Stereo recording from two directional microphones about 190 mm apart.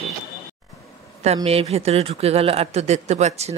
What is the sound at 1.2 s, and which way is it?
Speech, 35° right (ahead or behind).